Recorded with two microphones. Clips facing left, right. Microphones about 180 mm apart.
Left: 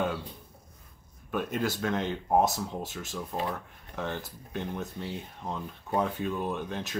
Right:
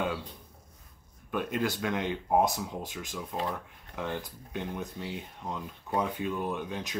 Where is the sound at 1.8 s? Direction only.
15° right (ahead or behind).